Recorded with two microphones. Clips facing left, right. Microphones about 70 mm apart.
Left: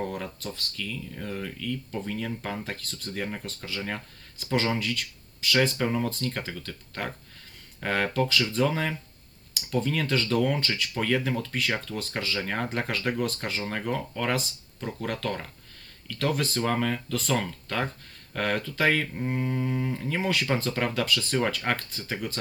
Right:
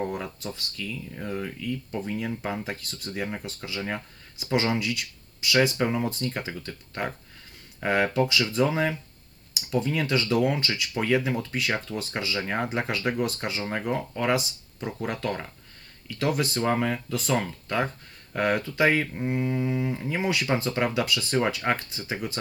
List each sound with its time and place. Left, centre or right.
0.0 s speech: centre
13.6 s speech: centre